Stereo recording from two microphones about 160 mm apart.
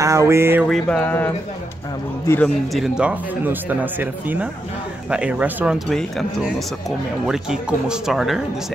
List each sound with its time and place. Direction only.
0.0 s a sound: 20° right (ahead or behind)
0.7 s music: 5° left (ahead or behind)
2.7 s speech: 5° right (ahead or behind)